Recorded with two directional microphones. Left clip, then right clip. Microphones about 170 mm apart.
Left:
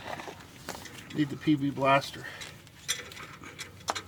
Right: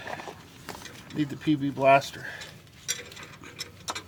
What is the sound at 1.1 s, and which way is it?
Speech, 20° right (ahead or behind).